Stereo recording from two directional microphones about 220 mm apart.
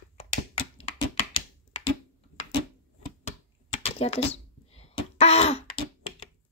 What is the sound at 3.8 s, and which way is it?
Throat clearing, 25° left (ahead or behind).